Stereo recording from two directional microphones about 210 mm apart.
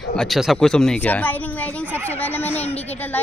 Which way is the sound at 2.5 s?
30° left (ahead or behind).